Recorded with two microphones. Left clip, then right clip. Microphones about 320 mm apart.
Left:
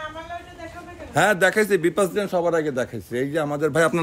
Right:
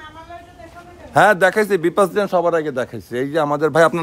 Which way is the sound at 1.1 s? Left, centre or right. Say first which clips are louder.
Right 5 dB; centre.